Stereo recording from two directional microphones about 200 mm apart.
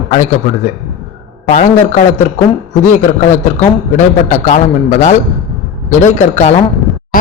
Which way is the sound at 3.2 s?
35° left (ahead or behind).